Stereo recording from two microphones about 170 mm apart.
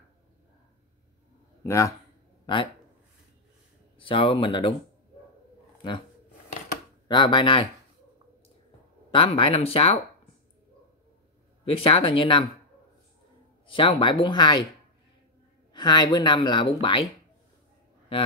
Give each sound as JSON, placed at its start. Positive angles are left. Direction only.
{"t": 1.6, "sound": "speech", "side_deg": 15}
{"t": 4.0, "sound": "speech", "side_deg": 30}
{"t": 7.1, "sound": "speech", "side_deg": 30}
{"t": 9.1, "sound": "speech", "side_deg": 30}
{"t": 11.6, "sound": "speech", "side_deg": 35}
{"t": 13.7, "sound": "speech", "side_deg": 30}
{"t": 15.7, "sound": "speech", "side_deg": 25}